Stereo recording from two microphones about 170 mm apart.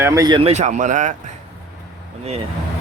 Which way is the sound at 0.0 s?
20° right (ahead or behind).